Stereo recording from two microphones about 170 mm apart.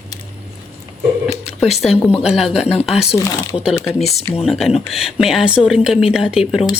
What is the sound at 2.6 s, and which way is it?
Speech, 40° left (ahead or behind).